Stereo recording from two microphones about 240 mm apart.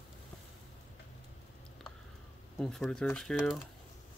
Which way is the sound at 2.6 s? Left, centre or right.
Centre.